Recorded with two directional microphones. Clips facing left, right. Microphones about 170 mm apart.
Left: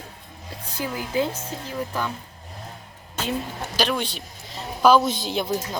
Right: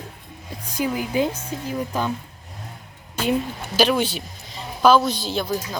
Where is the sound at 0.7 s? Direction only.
20° right (ahead or behind).